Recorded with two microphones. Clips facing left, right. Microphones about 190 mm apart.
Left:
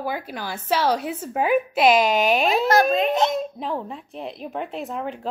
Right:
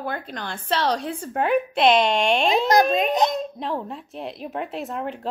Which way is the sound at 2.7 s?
15° right (ahead or behind).